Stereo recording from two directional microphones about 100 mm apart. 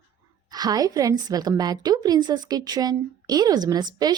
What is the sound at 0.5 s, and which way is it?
A woman's voice, 40° right (ahead or behind).